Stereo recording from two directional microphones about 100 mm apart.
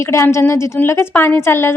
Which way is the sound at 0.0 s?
30° left (ahead or behind).